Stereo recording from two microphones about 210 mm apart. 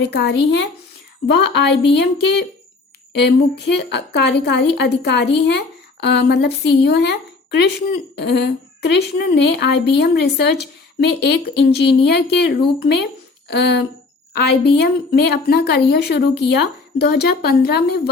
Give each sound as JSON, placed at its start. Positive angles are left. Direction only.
{"t": 0.0, "sound": "a woman's voice", "side_deg": 50}